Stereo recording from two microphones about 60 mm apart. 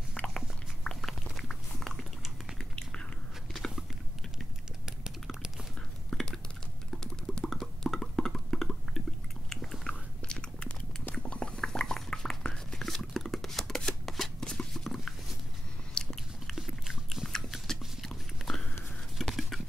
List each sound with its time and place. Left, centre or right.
0.1 s chewing: centre
1.3 s dog: centre
2.7 s biting: centre
6.0 s whispering: centre
6.9 s typing: centre
7.5 s music: centre
9.5 s biting: centre
11.2 s a sound: centre
14.0 s shuffling cards: centre
14.4 s a sound: centre
15.9 s biting: centre
17.3 s a sound: centre
19.1 s whispering: centre